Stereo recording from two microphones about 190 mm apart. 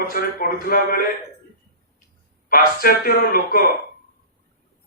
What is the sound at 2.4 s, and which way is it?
A man's voice, 50° left (ahead or behind).